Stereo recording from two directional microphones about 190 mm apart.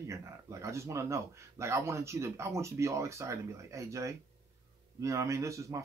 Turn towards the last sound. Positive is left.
turn(degrees=-15)  # may be behind; listen again after turning